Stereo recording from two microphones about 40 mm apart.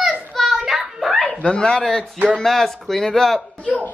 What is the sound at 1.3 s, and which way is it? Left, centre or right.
Speech, left.